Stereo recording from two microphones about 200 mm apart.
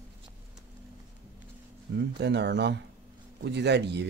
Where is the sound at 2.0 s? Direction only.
55° right (ahead or behind).